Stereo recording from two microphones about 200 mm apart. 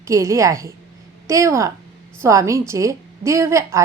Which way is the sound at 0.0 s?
15° right (ahead or behind).